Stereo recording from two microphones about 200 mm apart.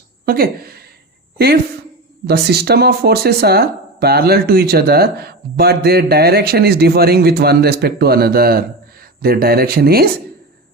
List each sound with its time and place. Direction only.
0.3 s a woman's voice: 50° right (ahead or behind)
2.2 s speech: 55° right (ahead or behind)